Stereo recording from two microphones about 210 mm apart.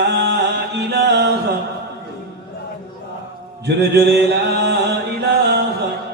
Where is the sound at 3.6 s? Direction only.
55° right (ahead or behind).